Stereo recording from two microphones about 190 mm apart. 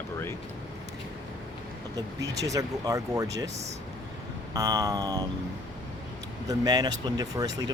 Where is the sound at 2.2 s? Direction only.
20° right (ahead or behind).